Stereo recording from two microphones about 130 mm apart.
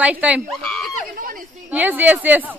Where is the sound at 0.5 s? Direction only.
Centre (ahead or behind).